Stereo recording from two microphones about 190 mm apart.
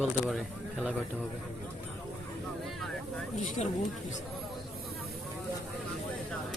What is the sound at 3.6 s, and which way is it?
Speech, 35° left (ahead or behind).